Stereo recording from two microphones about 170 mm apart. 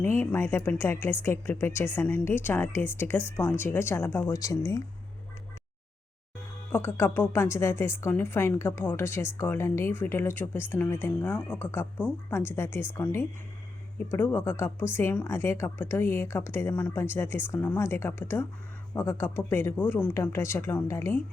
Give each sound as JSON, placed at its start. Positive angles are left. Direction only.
{"t": 0.1, "sound": "a woman's voice", "side_deg": 15}
{"t": 6.7, "sound": "a woman's voice", "side_deg": 15}